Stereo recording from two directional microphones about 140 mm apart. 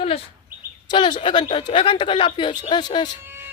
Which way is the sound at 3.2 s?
15° right (ahead or behind).